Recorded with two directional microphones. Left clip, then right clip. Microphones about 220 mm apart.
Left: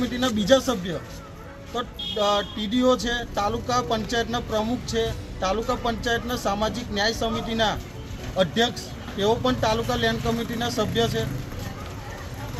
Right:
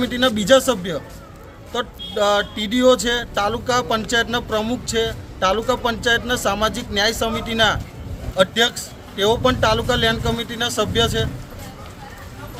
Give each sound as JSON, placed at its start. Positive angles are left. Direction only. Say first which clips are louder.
{"t": 0.0, "sound": "speech", "louder": "right 6 dB", "side_deg": -25}